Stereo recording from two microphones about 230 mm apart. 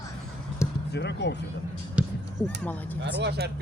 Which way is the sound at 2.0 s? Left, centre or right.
Centre.